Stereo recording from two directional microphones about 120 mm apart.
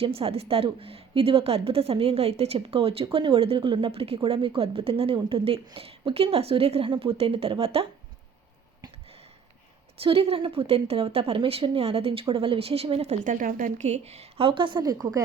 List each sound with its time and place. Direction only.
0.0 s a woman's voice: 55° right (ahead or behind)
10.0 s a woman's voice: 50° right (ahead or behind); by 15.2 s 30° right (ahead or behind)